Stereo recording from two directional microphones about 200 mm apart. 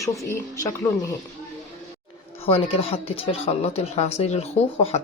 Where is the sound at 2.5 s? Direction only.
25° left (ahead or behind).